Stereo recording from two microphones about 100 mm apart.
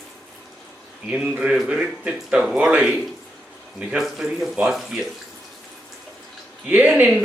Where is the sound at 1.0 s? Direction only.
10° right (ahead or behind).